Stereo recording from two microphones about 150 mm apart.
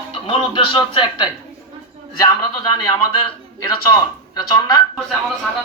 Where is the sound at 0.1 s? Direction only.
35° left (ahead or behind).